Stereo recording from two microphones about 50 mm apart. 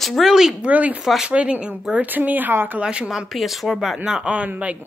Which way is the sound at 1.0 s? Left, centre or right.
Centre.